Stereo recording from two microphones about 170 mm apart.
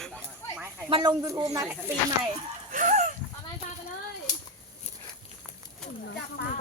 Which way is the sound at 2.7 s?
45° right (ahead or behind).